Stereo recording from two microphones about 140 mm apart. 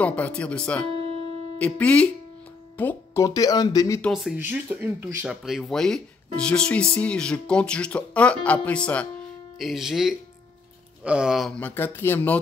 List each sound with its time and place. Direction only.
0.0 s speech: 10° left (ahead or behind); by 4.0 s 25° left (ahead or behind)
4.0 s speech: centre (ahead or behind)
4.4 s speech: 15° right (ahead or behind); by 9.0 s 10° left (ahead or behind)
9.6 s speech: centre (ahead or behind); by 12.4 s 15° left (ahead or behind)